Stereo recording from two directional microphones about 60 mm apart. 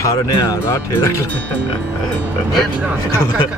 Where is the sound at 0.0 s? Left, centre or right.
Left.